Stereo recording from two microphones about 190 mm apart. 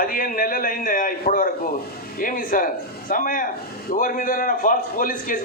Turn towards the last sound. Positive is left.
turn(degrees=45)  # may be behind; listen again after turning